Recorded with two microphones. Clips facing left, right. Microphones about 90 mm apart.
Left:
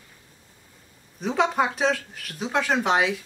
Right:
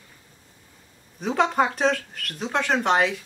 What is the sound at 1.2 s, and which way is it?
Speech, centre (ahead or behind).